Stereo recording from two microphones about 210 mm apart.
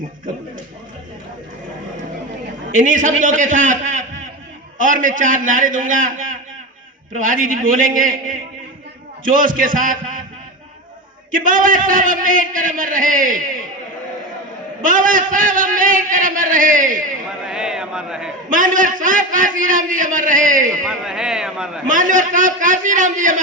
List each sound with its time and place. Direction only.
2.7 s a man's voice: 40° right (ahead or behind)
11.3 s a man's voice: 40° right (ahead or behind)
14.8 s a man's voice: 40° right (ahead or behind)
17.4 s speech: 5° right (ahead or behind)
18.5 s a man's voice: 40° right (ahead or behind)
20.8 s speech: centre (ahead or behind)
21.8 s a man's voice: 40° right (ahead or behind)